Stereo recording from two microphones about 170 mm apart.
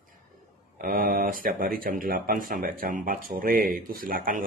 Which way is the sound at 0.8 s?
55° right (ahead or behind).